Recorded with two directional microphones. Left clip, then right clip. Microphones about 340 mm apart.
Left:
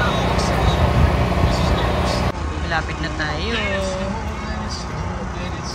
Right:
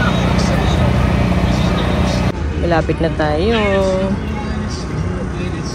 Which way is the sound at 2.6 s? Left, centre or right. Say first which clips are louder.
Right 8 dB; centre.